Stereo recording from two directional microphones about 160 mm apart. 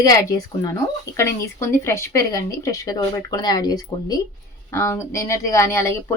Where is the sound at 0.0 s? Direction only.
20° left (ahead or behind).